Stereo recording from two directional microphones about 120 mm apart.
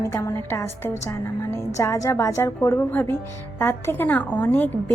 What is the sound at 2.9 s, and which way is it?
A woman's voice, 15° left (ahead or behind).